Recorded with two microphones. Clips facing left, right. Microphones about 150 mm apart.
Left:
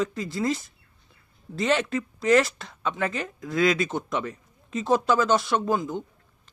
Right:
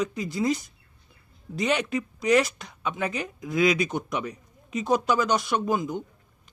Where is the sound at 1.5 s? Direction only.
15° right (ahead or behind).